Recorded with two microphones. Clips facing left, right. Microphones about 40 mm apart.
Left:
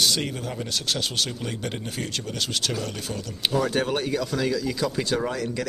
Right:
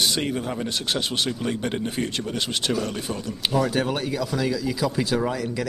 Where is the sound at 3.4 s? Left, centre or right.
Centre.